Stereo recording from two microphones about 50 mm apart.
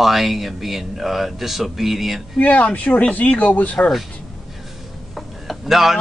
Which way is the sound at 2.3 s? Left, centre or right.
Left.